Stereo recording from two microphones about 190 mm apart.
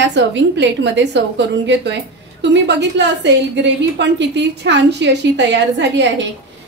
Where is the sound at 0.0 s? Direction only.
70° right (ahead or behind).